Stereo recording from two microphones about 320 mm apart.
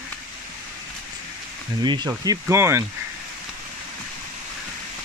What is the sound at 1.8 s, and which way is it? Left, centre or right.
Speech, centre.